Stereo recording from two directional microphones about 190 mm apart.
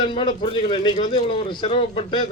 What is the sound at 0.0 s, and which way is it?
Speech, 25° left (ahead or behind).